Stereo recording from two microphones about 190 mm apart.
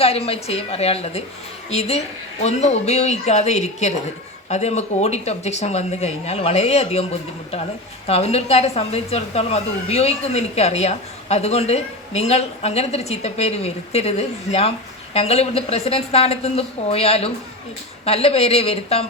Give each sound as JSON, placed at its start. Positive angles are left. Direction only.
{"t": 0.0, "sound": "speech", "side_deg": 30}